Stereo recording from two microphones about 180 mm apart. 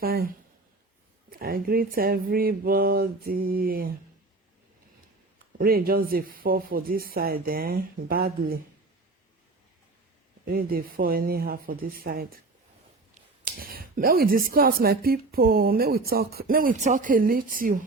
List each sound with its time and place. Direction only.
0.0 s speech: 55° right (ahead or behind)
1.3 s speech: 55° right (ahead or behind)
5.5 s speech: 55° right (ahead or behind)
10.4 s speech: 55° right (ahead or behind)
13.4 s speech: 55° right (ahead or behind)